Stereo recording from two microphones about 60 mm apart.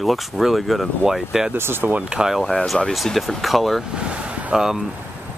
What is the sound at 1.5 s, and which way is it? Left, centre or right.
Speech, right.